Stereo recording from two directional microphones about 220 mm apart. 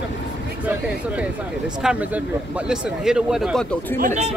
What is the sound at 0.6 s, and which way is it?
Speech, 5° right (ahead or behind).